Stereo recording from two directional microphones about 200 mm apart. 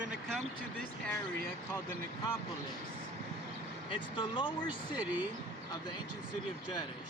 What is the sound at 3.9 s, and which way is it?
Speech, 25° left (ahead or behind).